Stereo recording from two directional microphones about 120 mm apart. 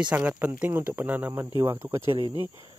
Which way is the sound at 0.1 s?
15° right (ahead or behind).